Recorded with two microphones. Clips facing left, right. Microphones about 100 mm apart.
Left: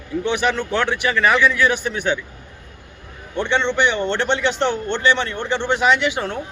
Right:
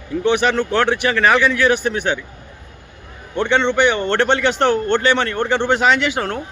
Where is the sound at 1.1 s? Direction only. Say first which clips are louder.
Even; 80° right.